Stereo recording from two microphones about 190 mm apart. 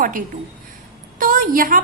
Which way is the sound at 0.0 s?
45° right (ahead or behind).